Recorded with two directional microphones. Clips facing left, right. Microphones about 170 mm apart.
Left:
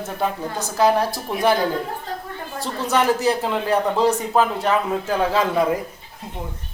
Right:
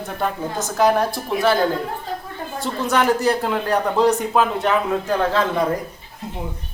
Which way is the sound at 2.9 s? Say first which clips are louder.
Even; centre (ahead or behind).